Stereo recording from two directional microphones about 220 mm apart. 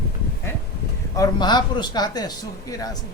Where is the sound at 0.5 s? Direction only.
10° left (ahead or behind).